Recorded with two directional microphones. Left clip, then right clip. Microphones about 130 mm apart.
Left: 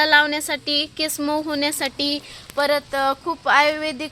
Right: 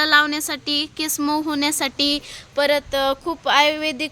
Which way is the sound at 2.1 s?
50° right (ahead or behind).